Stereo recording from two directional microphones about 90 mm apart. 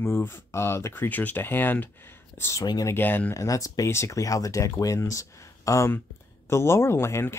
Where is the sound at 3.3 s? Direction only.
35° left (ahead or behind).